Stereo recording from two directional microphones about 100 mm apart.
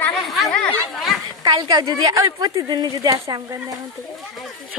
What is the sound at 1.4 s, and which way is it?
A child's voice, 45° right (ahead or behind).